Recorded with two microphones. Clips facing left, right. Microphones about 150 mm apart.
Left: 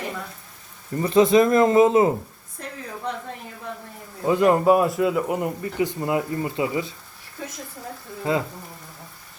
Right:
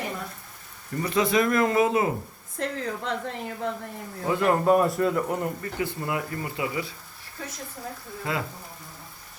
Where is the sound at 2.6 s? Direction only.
90° right.